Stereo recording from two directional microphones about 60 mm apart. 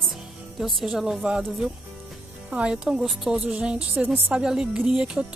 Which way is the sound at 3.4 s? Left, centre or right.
Right.